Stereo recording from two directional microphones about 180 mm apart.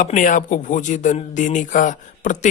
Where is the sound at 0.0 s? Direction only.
45° left (ahead or behind).